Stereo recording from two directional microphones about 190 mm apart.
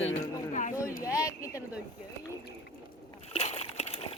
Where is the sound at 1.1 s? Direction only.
15° left (ahead or behind).